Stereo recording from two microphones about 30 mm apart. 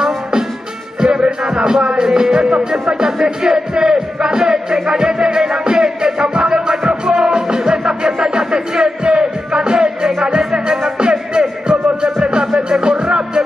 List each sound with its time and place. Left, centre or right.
0.0 s music: right